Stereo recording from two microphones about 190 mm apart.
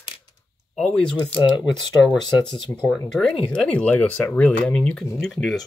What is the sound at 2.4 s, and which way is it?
Speech, centre (ahead or behind).